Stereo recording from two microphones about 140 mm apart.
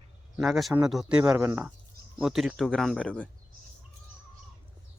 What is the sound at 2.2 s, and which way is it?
Speech, centre (ahead or behind).